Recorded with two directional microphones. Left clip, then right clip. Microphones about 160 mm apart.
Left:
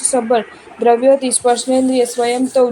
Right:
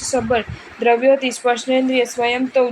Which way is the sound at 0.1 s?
35° left (ahead or behind).